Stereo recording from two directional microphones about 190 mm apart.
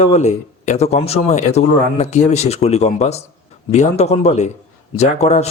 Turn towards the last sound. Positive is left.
turn(degrees=35)  # may be behind; listen again after turning